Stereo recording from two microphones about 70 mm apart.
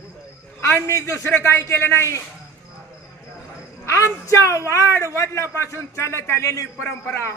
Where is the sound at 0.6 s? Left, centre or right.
Left.